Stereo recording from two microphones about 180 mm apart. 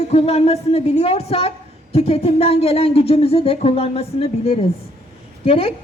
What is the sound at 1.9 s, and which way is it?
Speech, 35° left (ahead or behind).